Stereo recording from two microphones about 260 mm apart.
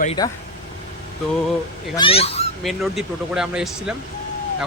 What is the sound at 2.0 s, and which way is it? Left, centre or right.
Speech, left.